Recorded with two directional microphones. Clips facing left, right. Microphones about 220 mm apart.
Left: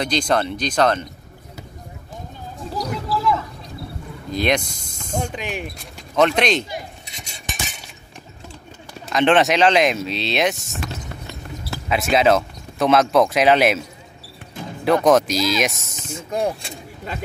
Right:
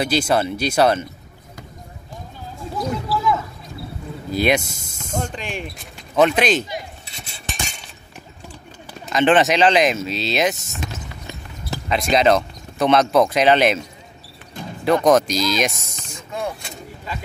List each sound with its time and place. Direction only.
0.0 s speech: 5° right (ahead or behind)
2.7 s a sound: centre (ahead or behind)
4.3 s speech: 5° right (ahead or behind)
5.1 s speech: 10° left (ahead or behind)
6.1 s speech: 5° right (ahead or behind)
9.1 s speech: centre (ahead or behind)
10.8 s basketball bounce: 15° right (ahead or behind)
11.9 s speech: 5° left (ahead or behind)
16.3 s speech: 35° left (ahead or behind)